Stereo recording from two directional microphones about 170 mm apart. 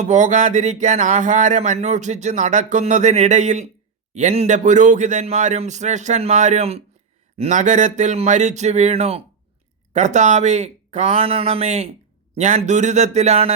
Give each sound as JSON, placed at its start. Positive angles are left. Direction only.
{"t": 0.0, "sound": "speech", "side_deg": -45}